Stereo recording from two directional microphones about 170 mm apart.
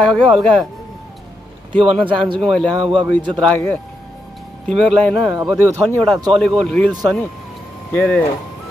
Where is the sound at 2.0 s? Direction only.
30° right (ahead or behind).